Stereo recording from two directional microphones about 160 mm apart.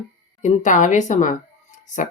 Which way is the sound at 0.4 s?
50° left (ahead or behind).